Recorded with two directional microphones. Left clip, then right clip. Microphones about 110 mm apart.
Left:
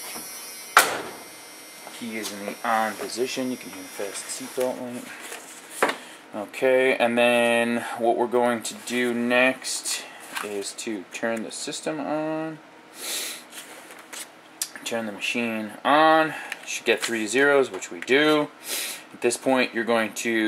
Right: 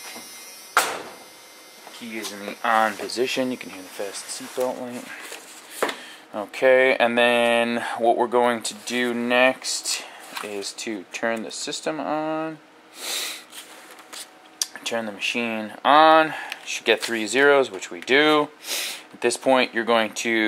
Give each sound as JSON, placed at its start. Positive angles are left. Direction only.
{"t": 2.0, "sound": "speech", "side_deg": -15}
{"t": 2.6, "sound": "speech", "side_deg": -55}
{"t": 3.1, "sound": "speech", "side_deg": -20}
{"t": 4.6, "sound": "speech", "side_deg": -5}
{"t": 6.3, "sound": "speech", "side_deg": -15}
{"t": 13.0, "sound": "snort", "side_deg": -10}
{"t": 14.1, "sound": "speech", "side_deg": -10}